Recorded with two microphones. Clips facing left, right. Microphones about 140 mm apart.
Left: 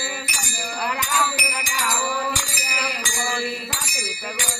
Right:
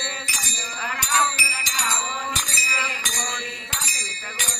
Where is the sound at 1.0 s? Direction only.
45° left (ahead or behind).